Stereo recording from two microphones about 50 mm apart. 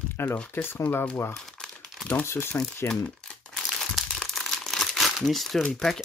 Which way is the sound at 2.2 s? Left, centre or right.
Left.